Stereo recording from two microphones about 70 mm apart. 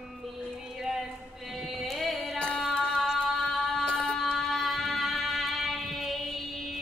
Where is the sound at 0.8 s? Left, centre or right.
Centre.